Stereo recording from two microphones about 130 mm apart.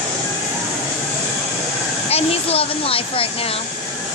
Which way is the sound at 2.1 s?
50° left (ahead or behind).